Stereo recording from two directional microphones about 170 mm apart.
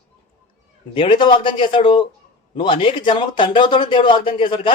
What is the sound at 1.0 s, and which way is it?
Speech, 30° left (ahead or behind).